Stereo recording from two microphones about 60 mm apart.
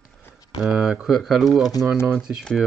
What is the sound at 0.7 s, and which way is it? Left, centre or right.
Speech, centre.